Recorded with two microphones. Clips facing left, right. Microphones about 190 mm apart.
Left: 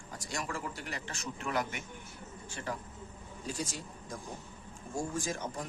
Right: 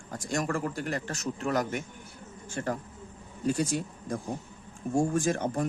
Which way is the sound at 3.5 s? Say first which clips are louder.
Right 11 dB; 60° right (ahead or behind).